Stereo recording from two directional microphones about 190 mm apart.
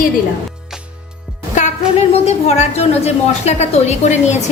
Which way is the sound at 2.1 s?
35° left (ahead or behind).